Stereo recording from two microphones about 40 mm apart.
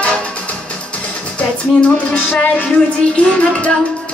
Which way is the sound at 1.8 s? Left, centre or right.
Left.